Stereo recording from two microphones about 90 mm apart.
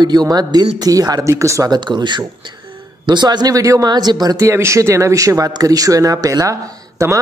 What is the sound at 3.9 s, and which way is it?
Speech, 50° right (ahead or behind).